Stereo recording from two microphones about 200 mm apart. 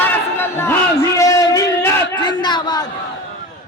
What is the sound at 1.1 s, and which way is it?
Crowd, 15° left (ahead or behind).